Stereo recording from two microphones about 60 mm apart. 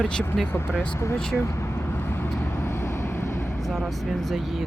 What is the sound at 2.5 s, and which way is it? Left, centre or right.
Vehicle, left.